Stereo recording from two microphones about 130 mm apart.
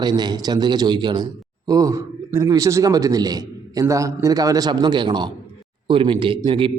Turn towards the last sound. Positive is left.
turn(degrees=-40)  # may be behind; listen again after turning